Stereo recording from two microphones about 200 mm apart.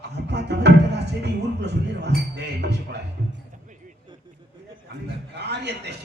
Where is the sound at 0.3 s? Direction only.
55° right (ahead or behind).